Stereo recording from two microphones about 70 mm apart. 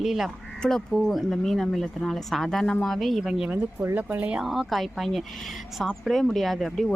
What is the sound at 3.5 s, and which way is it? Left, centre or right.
Speech, right.